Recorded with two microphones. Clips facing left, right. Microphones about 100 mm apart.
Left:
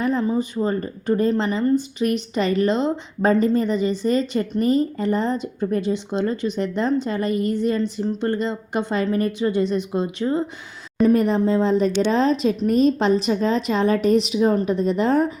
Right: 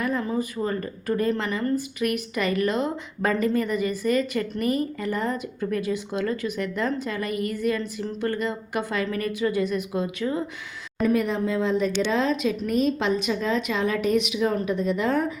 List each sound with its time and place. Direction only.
0.0 s a woman's voice: 25° left (ahead or behind)